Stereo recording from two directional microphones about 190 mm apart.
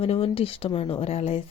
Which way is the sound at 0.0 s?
30° left (ahead or behind).